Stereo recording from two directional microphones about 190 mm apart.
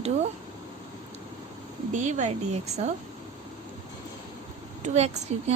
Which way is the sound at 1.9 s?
40° right (ahead or behind).